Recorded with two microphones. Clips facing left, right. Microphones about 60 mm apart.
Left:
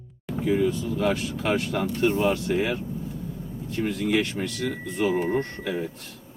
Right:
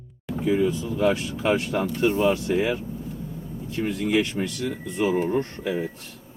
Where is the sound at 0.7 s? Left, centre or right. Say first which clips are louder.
Right 2 dB; right.